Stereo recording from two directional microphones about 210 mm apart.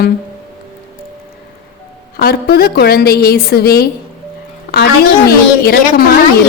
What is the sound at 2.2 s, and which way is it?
A woman's voice, 45° left (ahead or behind).